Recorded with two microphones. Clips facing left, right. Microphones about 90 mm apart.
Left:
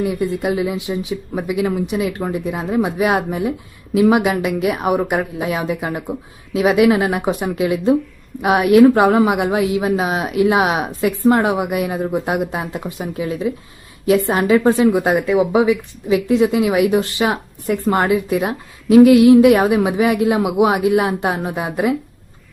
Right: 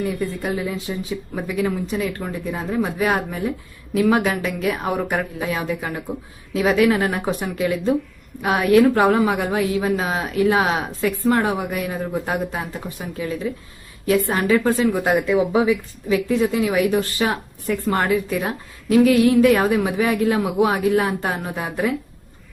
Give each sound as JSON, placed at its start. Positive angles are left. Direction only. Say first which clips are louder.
{"t": 0.0, "sound": "a woman's voice", "louder": "left 5 dB", "side_deg": 15}